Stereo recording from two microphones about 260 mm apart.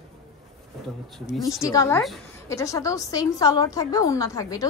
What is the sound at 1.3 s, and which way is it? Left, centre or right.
Speech, centre.